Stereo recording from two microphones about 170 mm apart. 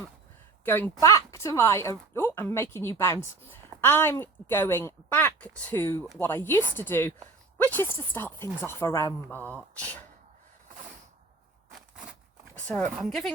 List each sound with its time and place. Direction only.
0.6 s speech: 10° left (ahead or behind)
12.5 s speech: 10° left (ahead or behind)